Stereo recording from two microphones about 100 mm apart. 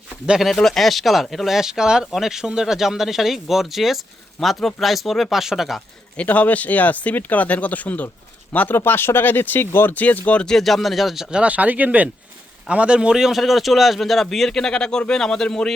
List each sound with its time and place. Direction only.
0.3 s speech: 5° right (ahead or behind)
6.1 s speech: 15° left (ahead or behind)